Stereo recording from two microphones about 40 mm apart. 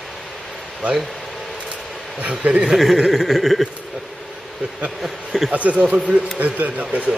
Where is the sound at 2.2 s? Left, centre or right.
Right.